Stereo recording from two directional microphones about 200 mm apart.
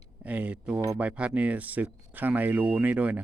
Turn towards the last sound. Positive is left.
turn(degrees=-5)  # may be behind; listen again after turning